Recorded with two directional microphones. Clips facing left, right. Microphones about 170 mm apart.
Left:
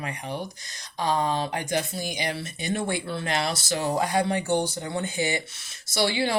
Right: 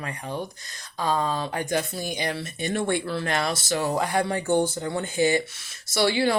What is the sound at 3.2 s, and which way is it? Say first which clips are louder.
A woman's voice: left 1 dB; 25° left (ahead or behind).